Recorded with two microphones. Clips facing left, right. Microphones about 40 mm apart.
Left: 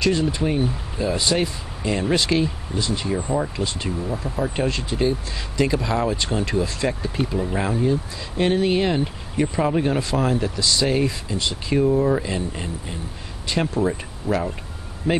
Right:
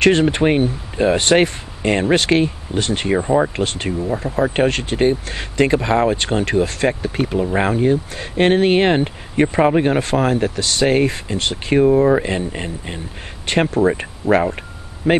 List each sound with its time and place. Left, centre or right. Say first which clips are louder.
0.0 s speech: right 7 dB; right
11.8 s speech: right 6 dB; right
13.5 s speech: right 6 dB; right